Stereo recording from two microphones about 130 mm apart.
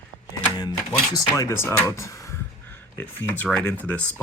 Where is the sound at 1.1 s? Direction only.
25° left (ahead or behind).